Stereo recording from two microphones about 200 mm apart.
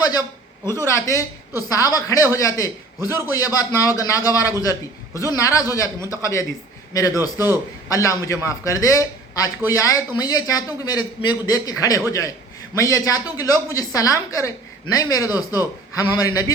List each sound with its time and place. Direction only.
0.0 s a woman's voice: 20° left (ahead or behind)